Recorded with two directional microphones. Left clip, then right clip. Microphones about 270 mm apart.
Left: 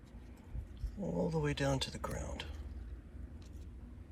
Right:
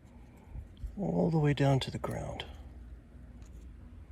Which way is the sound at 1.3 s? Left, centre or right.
Right.